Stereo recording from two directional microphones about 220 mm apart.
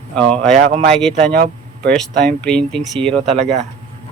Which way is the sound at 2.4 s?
5° left (ahead or behind).